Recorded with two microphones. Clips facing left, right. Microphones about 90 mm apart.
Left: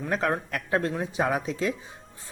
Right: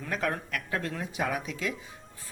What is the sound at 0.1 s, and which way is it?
Speech, 35° left (ahead or behind).